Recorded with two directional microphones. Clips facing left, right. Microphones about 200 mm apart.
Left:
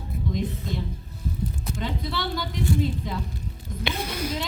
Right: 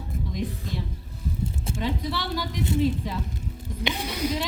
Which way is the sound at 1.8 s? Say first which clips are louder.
Right 1 dB; 10° right (ahead or behind).